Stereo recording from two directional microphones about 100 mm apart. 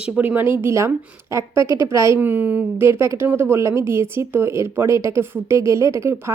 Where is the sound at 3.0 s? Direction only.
30° right (ahead or behind).